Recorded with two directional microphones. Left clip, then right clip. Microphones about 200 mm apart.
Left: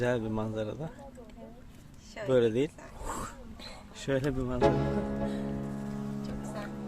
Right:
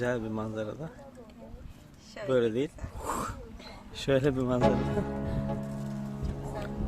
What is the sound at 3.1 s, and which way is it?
Wheeze, 25° right (ahead or behind).